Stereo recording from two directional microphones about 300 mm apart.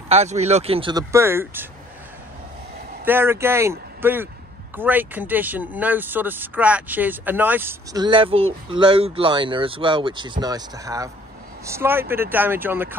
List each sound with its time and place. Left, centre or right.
0.1 s speech: right
3.1 s speech: centre